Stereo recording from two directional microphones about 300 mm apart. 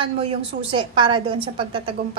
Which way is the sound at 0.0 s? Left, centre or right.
Centre.